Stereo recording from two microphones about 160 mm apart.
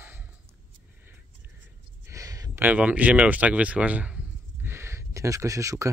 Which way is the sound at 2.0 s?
20° right (ahead or behind).